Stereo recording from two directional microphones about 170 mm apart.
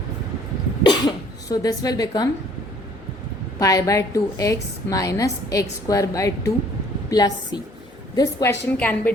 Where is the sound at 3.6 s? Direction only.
20° left (ahead or behind).